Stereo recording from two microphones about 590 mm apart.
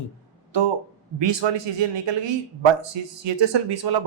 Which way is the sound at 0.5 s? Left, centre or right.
Right.